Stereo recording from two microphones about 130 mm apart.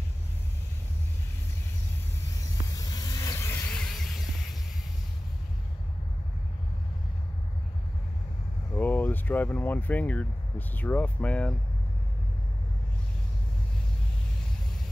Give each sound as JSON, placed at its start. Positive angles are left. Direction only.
{"t": 2.7, "sound": "vehicle", "side_deg": 30}
{"t": 3.7, "sound": "music", "side_deg": 5}
{"t": 8.7, "sound": "speech", "side_deg": 15}